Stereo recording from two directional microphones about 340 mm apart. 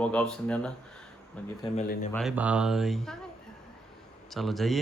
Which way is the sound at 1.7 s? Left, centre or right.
Left.